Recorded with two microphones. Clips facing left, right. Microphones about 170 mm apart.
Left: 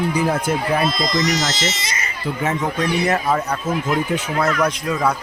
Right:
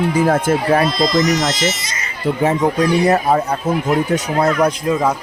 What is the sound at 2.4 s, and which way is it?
Speech, 35° right (ahead or behind).